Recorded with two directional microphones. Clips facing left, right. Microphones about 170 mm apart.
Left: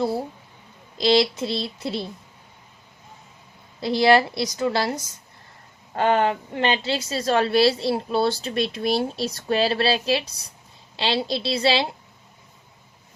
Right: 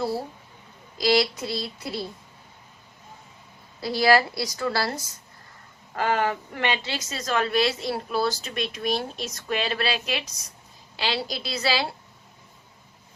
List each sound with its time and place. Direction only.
0.9 s a woman's voice: 25° left (ahead or behind)
3.8 s a woman's voice: 25° left (ahead or behind)